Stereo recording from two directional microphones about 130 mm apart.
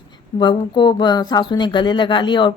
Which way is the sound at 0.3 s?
35° left (ahead or behind).